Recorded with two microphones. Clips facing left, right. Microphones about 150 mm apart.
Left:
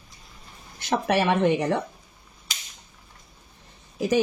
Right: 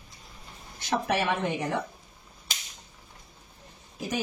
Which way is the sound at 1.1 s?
75° left (ahead or behind).